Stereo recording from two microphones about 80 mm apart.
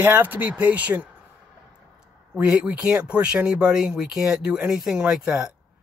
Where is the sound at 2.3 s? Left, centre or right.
Centre.